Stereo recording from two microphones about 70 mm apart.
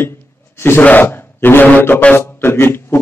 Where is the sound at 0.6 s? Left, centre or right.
Left.